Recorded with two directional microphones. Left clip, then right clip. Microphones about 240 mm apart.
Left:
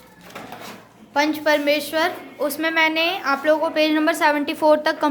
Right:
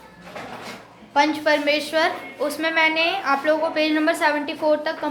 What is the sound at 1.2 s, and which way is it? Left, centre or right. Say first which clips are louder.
A woman's voice: even; left.